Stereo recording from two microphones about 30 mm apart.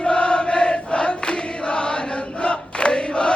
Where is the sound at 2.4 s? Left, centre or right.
Left.